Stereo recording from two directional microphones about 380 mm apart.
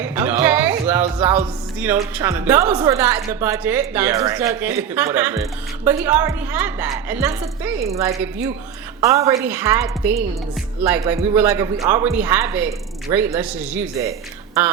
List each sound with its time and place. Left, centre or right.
0.0 s a woman's voice: centre